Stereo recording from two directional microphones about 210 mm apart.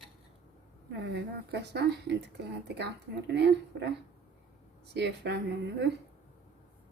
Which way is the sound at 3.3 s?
55° right (ahead or behind).